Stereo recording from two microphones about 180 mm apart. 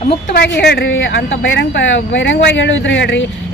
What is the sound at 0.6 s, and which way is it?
Speech, 60° left (ahead or behind).